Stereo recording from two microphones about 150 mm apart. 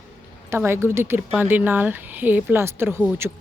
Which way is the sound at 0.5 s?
15° right (ahead or behind).